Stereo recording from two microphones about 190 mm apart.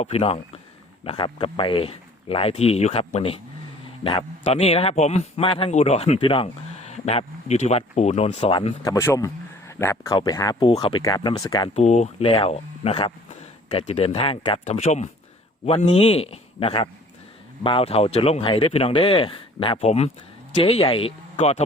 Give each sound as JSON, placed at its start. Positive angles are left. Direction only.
{"t": 0.0, "sound": "speech", "side_deg": 30}
{"t": 8.8, "sound": "speech", "side_deg": 15}
{"t": 10.1, "sound": "speech", "side_deg": 25}
{"t": 11.7, "sound": "speech", "side_deg": 35}